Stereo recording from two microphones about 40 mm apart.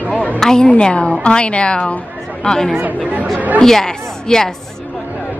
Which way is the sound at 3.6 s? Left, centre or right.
Centre.